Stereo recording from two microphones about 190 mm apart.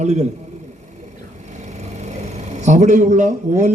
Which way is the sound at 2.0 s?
35° right (ahead or behind).